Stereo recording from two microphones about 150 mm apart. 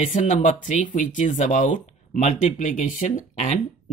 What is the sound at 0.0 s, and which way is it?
Speech, 55° left (ahead or behind).